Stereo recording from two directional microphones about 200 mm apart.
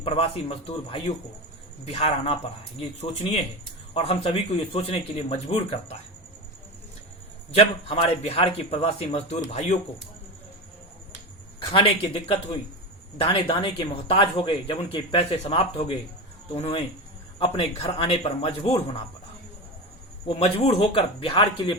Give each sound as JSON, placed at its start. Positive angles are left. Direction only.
{"t": 0.0, "sound": "speech", "side_deg": 30}
{"t": 7.5, "sound": "a man's voice", "side_deg": 30}
{"t": 11.6, "sound": "speech", "side_deg": 25}
{"t": 20.2, "sound": "speech", "side_deg": 30}